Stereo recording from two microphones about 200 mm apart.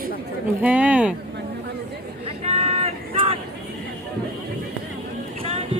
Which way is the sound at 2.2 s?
30° right (ahead or behind).